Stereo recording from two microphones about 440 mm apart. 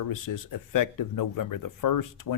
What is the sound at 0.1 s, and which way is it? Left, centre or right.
Speech, left.